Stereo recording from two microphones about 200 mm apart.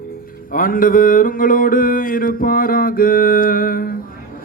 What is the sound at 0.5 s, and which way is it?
Mantra, 45° left (ahead or behind).